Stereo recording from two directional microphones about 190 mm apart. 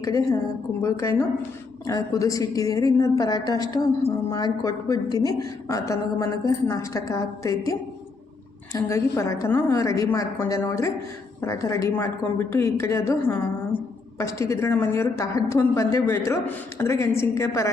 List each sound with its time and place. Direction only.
0.0 s a woman's voice: 15° left (ahead or behind)